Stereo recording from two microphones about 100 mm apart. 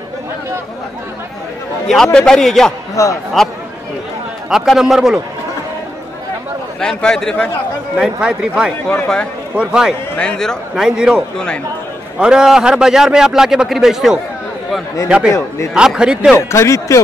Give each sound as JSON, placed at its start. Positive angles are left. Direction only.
{"t": 2.1, "sound": "a man's voice", "side_deg": 5}
{"t": 3.0, "sound": "speech", "side_deg": 30}
{"t": 4.5, "sound": "a man's voice", "side_deg": -5}
{"t": 6.8, "sound": "a man's voice", "side_deg": 5}
{"t": 8.0, "sound": "speech", "side_deg": -5}
{"t": 8.8, "sound": "a man's voice", "side_deg": 5}
{"t": 9.6, "sound": "speech", "side_deg": -5}
{"t": 10.1, "sound": "a man's voice", "side_deg": 10}
{"t": 10.8, "sound": "speech", "side_deg": -5}
{"t": 11.3, "sound": "a man's voice", "side_deg": 10}
{"t": 12.2, "sound": "a man's voice", "side_deg": -5}
{"t": 16.3, "sound": "speech", "side_deg": 30}